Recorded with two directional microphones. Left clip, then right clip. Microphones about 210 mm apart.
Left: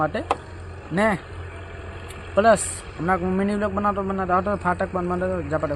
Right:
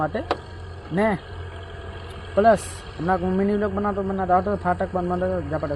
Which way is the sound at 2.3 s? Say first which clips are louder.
Even; 5° left (ahead or behind).